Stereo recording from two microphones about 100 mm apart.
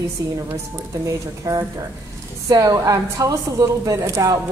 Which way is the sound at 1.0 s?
35° right (ahead or behind).